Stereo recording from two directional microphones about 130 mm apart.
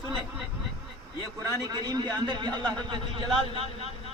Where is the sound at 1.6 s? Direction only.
30° right (ahead or behind).